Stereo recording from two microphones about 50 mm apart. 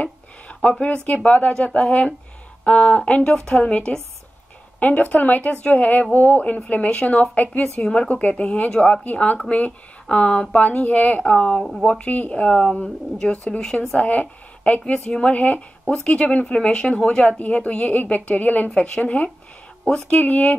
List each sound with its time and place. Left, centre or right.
0.0 s a sound: left
0.8 s speech: left
3.3 s speech: centre
4.7 s a woman's voice: left
9.0 s a woman's voice: left
13.9 s a woman's voice: left
15.3 s speech: left